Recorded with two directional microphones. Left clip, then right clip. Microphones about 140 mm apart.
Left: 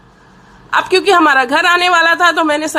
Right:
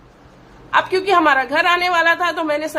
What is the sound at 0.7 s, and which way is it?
Speech, 25° left (ahead or behind).